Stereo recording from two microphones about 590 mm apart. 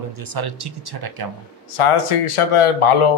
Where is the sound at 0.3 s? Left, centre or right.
Right.